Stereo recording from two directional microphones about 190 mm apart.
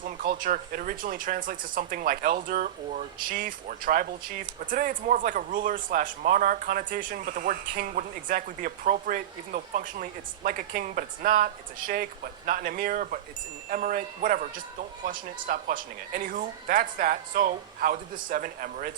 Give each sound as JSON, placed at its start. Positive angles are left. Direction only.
{"t": 0.0, "sound": "speech", "side_deg": -45}